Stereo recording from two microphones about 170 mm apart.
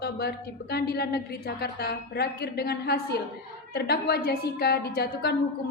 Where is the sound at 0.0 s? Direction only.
65° left (ahead or behind).